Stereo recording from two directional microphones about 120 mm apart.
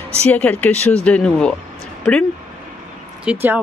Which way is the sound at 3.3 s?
10° right (ahead or behind).